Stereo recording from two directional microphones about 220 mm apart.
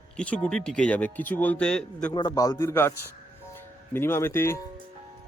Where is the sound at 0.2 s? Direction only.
5° left (ahead or behind).